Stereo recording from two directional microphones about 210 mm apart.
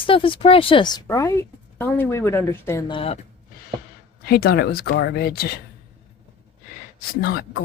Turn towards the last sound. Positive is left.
turn(degrees=45)  # may be behind; listen again after turning